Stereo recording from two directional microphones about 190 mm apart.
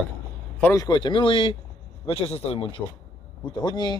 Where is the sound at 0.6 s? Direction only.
20° left (ahead or behind).